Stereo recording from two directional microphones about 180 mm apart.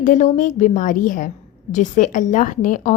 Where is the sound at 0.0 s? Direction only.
45° left (ahead or behind).